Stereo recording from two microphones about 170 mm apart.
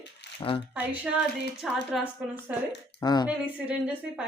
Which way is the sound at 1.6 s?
Centre (ahead or behind).